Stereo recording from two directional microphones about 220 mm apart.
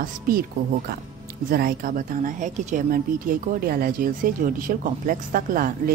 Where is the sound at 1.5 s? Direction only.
40° right (ahead or behind).